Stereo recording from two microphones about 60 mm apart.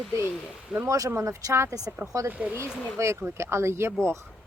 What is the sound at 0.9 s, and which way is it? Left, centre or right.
Speech, right.